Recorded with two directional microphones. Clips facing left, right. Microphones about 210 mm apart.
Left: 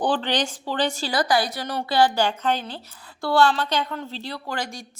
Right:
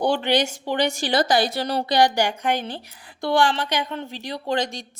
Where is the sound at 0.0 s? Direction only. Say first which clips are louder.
Right 3 dB; 10° right (ahead or behind); by 1.8 s 30° right (ahead or behind).